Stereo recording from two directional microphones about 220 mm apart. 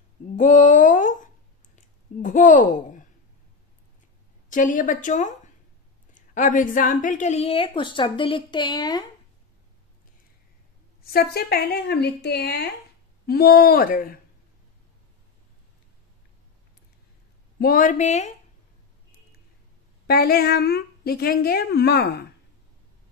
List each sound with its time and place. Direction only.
0.4 s a sound: 35° left (ahead or behind)
2.2 s speech: 35° left (ahead or behind)
4.5 s a woman's voice: 35° left (ahead or behind); by 9.0 s 20° left (ahead or behind)
11.1 s a woman's voice: 45° left (ahead or behind)
17.6 s a woman's voice: 40° left (ahead or behind)
20.1 s a woman's voice: 45° left (ahead or behind)